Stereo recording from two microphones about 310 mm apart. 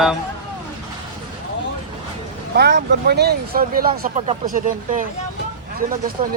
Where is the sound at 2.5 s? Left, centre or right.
Right.